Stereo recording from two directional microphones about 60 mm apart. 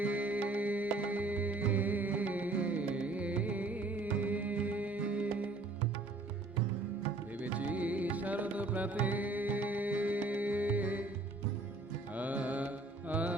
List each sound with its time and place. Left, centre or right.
0.0 s music: right
7.4 s music: right
12.1 s music: right